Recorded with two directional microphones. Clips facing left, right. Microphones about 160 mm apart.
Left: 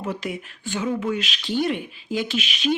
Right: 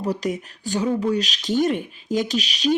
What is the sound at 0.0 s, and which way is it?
Speech, 40° right (ahead or behind).